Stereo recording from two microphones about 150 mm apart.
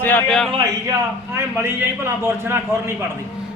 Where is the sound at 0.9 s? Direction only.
20° right (ahead or behind).